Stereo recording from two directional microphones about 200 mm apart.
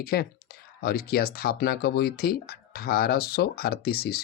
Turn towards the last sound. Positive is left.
turn(degrees=50)  # may be behind; listen again after turning